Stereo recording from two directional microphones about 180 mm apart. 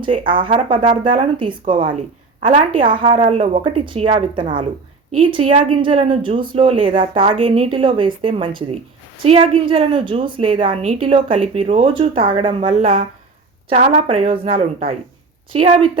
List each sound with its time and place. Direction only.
0.0 s a woman's voice: 30° right (ahead or behind)